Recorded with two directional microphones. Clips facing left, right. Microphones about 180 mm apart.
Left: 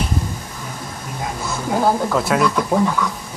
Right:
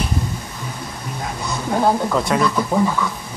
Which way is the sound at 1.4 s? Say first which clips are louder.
Even; 5° left (ahead or behind).